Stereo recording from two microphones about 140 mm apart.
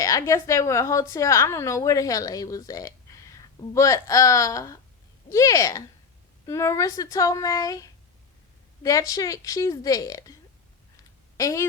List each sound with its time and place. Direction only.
0.0 s a woman's voice: 25° left (ahead or behind)
11.3 s a woman's voice: 20° left (ahead or behind)